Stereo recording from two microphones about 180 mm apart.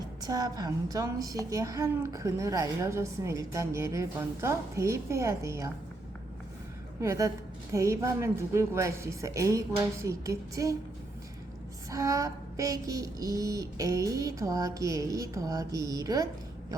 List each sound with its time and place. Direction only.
0.3 s a woman's voice: 20° right (ahead or behind)
7.0 s a woman's voice: 15° right (ahead or behind)
11.9 s a woman's voice: 20° right (ahead or behind)